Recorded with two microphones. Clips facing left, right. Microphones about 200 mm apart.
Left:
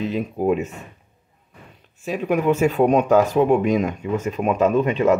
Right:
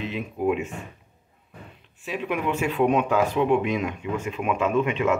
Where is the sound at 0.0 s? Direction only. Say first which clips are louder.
Left 4 dB; 40° left (ahead or behind).